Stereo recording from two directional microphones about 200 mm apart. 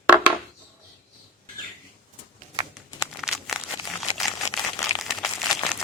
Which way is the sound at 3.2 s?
Centre (ahead or behind).